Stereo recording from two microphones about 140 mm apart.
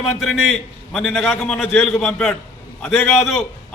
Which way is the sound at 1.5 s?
15° left (ahead or behind).